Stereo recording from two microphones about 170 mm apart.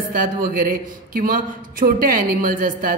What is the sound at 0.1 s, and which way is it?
A man's voice, 55° right (ahead or behind).